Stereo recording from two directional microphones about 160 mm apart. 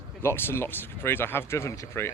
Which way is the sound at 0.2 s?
15° left (ahead or behind).